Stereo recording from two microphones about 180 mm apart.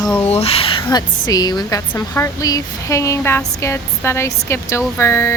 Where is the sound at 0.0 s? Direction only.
5° left (ahead or behind).